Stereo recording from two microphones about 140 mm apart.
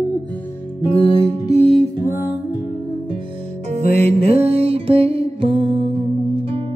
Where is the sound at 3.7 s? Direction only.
50° right (ahead or behind).